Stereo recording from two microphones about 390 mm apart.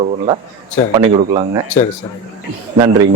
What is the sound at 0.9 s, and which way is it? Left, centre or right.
Speech, centre.